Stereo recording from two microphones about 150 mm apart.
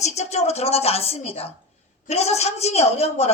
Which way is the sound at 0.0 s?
45° left (ahead or behind).